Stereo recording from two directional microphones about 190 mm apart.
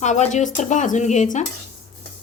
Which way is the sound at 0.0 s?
35° left (ahead or behind).